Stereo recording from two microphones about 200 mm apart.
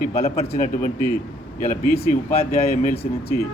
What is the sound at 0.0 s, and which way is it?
A man's voice, 40° left (ahead or behind).